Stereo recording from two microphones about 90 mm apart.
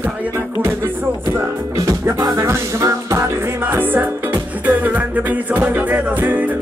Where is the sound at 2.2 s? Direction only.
35° right (ahead or behind).